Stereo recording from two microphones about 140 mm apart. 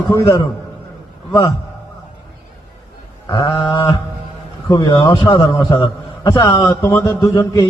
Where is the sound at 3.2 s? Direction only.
30° left (ahead or behind).